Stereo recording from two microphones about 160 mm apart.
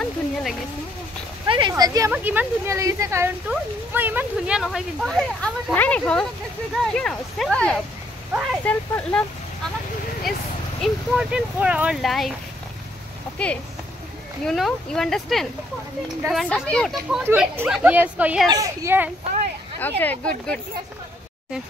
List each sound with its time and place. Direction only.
0.0 s a sound: 5° left (ahead or behind)
1.5 s a sound: 25° right (ahead or behind)
2.1 s speech: 10° right (ahead or behind)
4.6 s speech: centre (ahead or behind)
10.8 s speech: 5° right (ahead or behind)
13.4 s speech: 5° left (ahead or behind)
17.2 s speech: 15° right (ahead or behind)
18.5 s a child's voice: 20° right (ahead or behind)
19.8 s speech: 10° left (ahead or behind)